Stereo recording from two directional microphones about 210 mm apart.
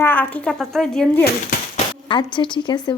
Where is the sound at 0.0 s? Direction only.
10° left (ahead or behind).